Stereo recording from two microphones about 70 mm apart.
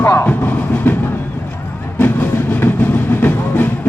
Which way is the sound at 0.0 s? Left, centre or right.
Left.